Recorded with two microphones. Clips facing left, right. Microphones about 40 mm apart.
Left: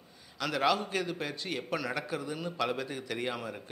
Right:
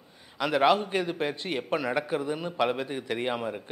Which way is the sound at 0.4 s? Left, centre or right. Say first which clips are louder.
Right 6 dB; right.